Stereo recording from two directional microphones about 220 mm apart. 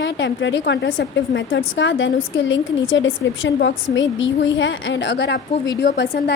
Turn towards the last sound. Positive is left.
turn(degrees=50)  # may be behind; listen again after turning